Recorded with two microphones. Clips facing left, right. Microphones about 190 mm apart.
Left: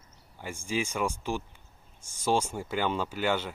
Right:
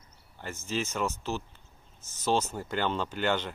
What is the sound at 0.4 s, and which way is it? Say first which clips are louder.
Speech: left 1 dB; 10° left (ahead or behind).